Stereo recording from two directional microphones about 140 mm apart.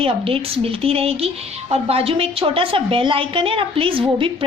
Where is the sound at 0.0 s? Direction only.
40° right (ahead or behind).